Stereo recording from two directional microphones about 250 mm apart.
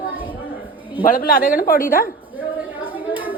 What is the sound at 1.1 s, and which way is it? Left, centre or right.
Speech, left.